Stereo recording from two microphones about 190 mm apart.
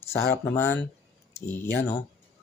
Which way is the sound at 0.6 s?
10° left (ahead or behind).